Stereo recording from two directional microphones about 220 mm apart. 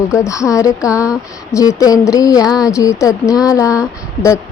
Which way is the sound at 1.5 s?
15° left (ahead or behind).